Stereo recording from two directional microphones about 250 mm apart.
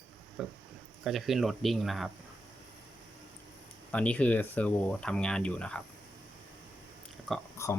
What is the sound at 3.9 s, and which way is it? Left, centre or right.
Speech, centre.